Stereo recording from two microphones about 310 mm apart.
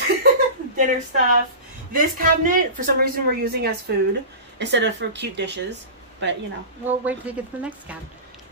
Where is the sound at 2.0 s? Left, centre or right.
Right.